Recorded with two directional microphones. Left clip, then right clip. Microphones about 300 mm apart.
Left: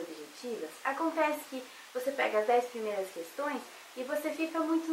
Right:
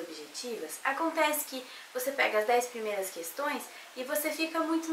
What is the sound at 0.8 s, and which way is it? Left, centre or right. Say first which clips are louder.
Speech: right 2 dB; centre.